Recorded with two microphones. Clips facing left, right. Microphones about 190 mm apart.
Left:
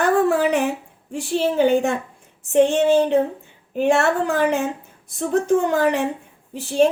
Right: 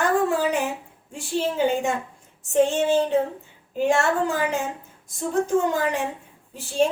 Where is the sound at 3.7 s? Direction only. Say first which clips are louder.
Left 3 dB; 65° left (ahead or behind).